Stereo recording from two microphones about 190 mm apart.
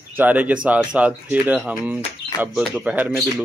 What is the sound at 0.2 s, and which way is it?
Speech, 10° right (ahead or behind).